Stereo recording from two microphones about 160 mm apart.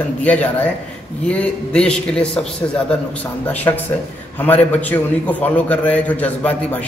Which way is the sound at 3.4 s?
10° left (ahead or behind).